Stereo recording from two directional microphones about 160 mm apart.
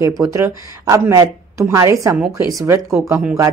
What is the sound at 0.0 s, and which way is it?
A woman's voice, 20° right (ahead or behind).